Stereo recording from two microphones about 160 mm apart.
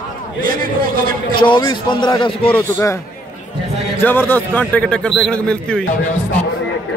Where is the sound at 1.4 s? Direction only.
30° left (ahead or behind).